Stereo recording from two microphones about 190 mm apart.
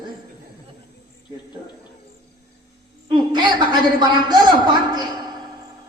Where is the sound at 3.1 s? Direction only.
25° right (ahead or behind).